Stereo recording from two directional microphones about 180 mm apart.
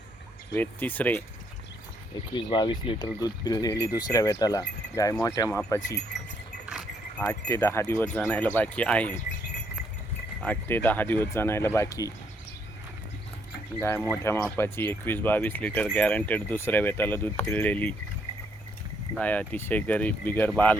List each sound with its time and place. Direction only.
0.5 s speech: 10° left (ahead or behind)
2.3 s speech: 25° left (ahead or behind)
7.3 s speech: 15° left (ahead or behind)
10.4 s speech: 10° left (ahead or behind)
13.8 s speech: 10° left (ahead or behind)
19.1 s speech: 10° left (ahead or behind)